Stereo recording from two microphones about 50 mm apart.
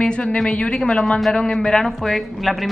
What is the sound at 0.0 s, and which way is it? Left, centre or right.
A woman's voice, left.